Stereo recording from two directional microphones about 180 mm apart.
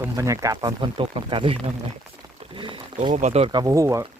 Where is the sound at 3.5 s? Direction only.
20° right (ahead or behind).